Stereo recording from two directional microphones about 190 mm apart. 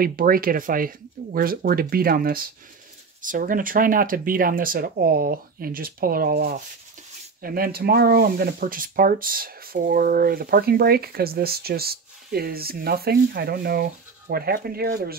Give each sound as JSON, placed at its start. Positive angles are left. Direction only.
{"t": 0.0, "sound": "speech", "side_deg": -50}